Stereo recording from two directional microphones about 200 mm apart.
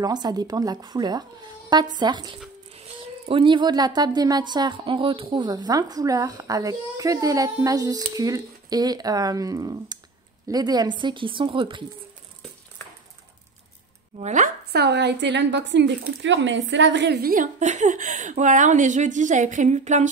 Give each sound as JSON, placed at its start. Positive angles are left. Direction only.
{"t": 0.0, "sound": "a woman's voice", "side_deg": -20}
{"t": 14.2, "sound": "speech", "side_deg": -40}
{"t": 14.7, "sound": "speech", "side_deg": -55}